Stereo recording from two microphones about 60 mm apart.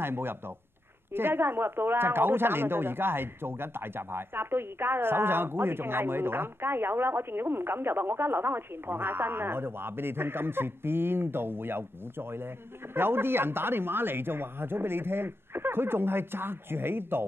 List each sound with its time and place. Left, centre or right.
0.0 s a woman's voice: right